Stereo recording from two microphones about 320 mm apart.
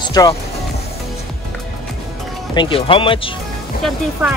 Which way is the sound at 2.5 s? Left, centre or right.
Centre.